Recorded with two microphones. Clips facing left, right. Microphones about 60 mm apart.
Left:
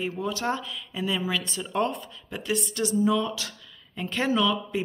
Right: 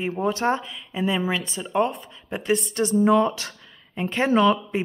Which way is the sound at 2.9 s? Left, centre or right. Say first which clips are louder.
Right 6 dB; right.